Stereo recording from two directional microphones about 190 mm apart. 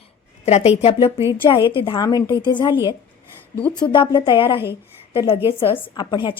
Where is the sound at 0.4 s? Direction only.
35° left (ahead or behind).